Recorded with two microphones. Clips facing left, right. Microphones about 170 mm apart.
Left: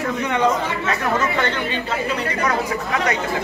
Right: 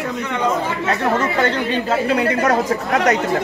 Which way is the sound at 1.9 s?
50° right (ahead or behind).